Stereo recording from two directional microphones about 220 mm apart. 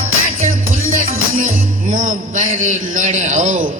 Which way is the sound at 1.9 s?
35° right (ahead or behind).